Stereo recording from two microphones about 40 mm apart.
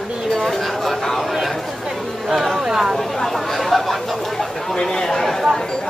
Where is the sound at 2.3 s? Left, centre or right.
Centre.